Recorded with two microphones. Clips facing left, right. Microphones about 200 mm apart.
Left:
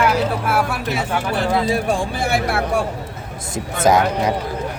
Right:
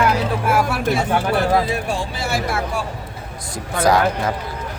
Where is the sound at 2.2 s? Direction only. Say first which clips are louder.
Left 3 dB; 60° left (ahead or behind).